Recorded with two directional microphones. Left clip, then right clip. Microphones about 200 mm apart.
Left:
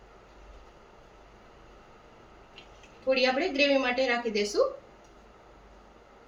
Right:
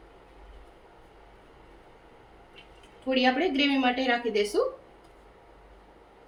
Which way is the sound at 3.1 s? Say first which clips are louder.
Right 1 dB; 40° right (ahead or behind).